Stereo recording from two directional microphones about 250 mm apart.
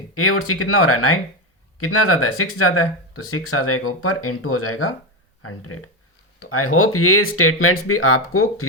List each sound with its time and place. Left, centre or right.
0.1 s speech: left